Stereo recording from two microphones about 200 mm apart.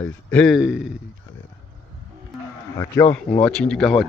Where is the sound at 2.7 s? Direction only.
15° left (ahead or behind).